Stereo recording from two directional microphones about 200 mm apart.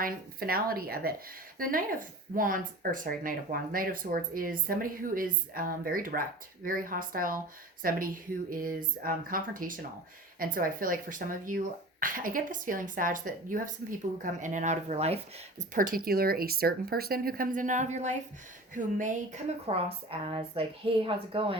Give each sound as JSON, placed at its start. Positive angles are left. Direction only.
{"t": 0.0, "sound": "a woman's voice", "side_deg": -50}